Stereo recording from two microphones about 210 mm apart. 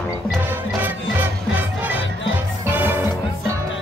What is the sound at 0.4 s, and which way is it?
Music, 10° right (ahead or behind).